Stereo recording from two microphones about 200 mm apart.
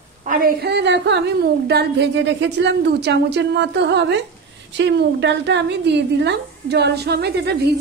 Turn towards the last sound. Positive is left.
turn(degrees=-55)  # may be behind; listen again after turning